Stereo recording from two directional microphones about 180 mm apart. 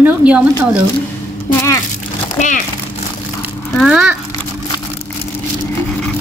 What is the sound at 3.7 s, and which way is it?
Speech, 5° right (ahead or behind).